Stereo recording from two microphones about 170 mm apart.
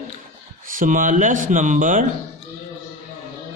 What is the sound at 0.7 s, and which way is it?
A man's voice, 55° right (ahead or behind).